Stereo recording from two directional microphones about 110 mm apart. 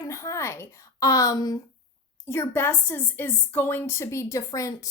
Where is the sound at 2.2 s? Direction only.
20° left (ahead or behind).